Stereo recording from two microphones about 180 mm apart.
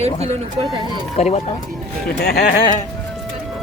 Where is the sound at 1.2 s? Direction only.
35° left (ahead or behind).